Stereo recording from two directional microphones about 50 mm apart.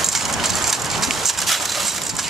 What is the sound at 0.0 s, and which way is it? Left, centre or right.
Crushing, centre.